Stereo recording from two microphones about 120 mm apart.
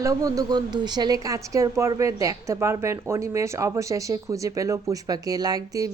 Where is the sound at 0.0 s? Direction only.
30° right (ahead or behind).